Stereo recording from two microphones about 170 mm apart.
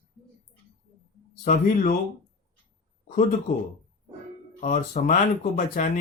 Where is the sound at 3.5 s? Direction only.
65° left (ahead or behind).